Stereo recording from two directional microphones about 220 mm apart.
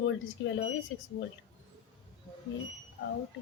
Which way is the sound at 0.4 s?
60° left (ahead or behind).